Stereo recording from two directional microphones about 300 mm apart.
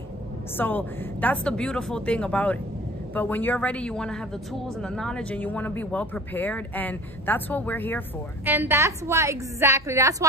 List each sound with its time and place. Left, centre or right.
0.6 s a woman's voice: centre
8.5 s a woman's voice: centre